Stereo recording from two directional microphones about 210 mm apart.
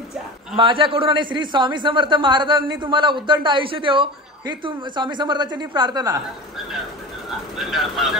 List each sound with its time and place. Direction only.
0.6 s a man's voice: 25° right (ahead or behind)
7.2 s speech: centre (ahead or behind)